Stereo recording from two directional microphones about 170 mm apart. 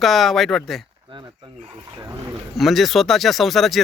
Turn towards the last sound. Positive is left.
turn(degrees=0)  # may be behind; listen again after turning